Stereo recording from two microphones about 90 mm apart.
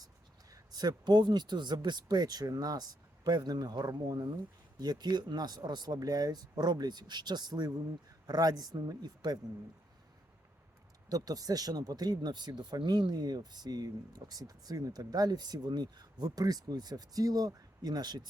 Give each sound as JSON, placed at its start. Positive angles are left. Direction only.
{"t": 0.5, "sound": "speech", "side_deg": -50}
{"t": 11.1, "sound": "speech", "side_deg": -45}